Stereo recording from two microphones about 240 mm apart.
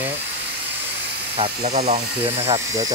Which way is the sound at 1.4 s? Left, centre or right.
Right.